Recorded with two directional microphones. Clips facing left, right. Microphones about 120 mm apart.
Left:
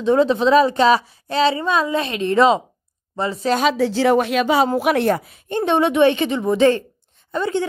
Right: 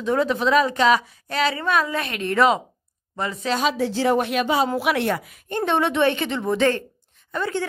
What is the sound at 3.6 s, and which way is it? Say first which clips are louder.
Speech: left 3 dB; 90° left.